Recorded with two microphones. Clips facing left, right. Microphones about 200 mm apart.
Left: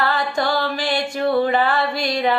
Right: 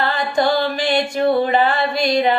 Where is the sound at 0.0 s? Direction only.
20° right (ahead or behind).